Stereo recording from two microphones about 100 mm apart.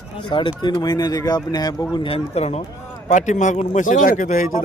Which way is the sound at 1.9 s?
65° left (ahead or behind).